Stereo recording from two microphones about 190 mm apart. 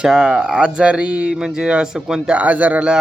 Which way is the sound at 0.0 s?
5° right (ahead or behind).